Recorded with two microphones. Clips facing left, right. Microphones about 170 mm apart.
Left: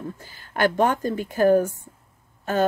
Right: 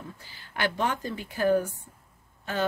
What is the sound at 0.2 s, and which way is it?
Speech, 50° left (ahead or behind).